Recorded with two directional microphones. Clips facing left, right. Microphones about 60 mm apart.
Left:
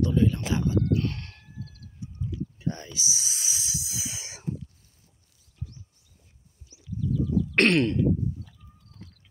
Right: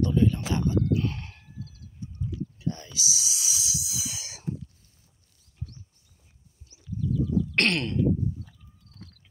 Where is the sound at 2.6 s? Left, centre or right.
Left.